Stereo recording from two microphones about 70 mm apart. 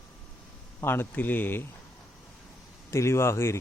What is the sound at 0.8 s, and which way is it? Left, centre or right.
Speech, left.